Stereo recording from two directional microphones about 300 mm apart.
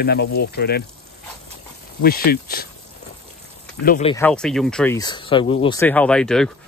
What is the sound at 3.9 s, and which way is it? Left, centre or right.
Speech, left.